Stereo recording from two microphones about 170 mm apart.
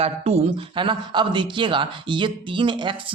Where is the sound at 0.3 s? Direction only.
40° right (ahead or behind).